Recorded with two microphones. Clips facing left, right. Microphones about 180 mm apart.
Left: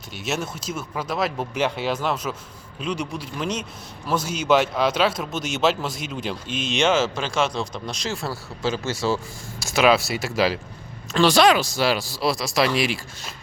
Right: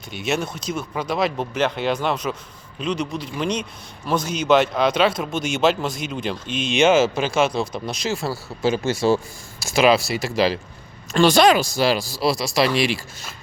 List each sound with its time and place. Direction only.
0.1 s a man's voice: centre (ahead or behind)
8.8 s speech: 55° right (ahead or behind)
9.7 s speech: centre (ahead or behind)